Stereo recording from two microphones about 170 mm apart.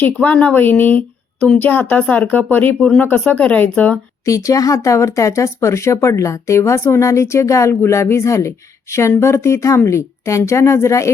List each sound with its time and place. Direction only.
0.0 s speech: 10° left (ahead or behind)